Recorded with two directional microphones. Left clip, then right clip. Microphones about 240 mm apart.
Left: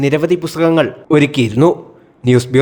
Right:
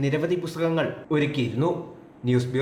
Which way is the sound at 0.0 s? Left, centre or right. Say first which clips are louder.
Left 11 dB; left.